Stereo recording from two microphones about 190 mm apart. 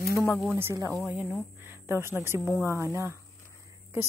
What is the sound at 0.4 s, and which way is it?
Speech, 10° right (ahead or behind).